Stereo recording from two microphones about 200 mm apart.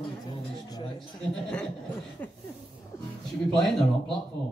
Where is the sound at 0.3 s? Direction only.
20° left (ahead or behind).